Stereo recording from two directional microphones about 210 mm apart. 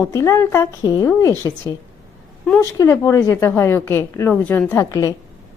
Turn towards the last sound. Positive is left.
turn(degrees=15)  # may be behind; listen again after turning